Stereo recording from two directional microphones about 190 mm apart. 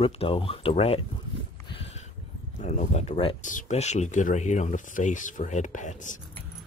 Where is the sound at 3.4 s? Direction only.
40° left (ahead or behind).